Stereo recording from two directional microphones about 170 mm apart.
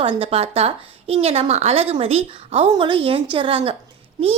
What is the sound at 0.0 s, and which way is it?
A woman's voice, 30° right (ahead or behind).